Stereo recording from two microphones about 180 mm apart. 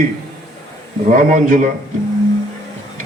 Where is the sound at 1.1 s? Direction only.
45° right (ahead or behind).